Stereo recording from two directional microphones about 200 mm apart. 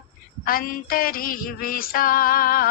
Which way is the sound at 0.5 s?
45° left (ahead or behind).